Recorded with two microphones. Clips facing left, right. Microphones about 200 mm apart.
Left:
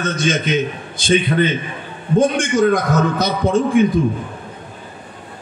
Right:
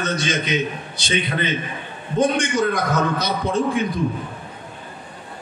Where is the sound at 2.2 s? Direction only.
50° left (ahead or behind).